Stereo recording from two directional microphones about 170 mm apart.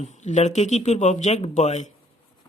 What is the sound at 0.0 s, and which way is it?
Speech, 45° left (ahead or behind).